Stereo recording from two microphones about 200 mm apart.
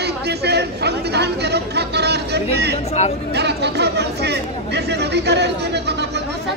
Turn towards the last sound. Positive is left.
turn(degrees=-60)  # may be behind; listen again after turning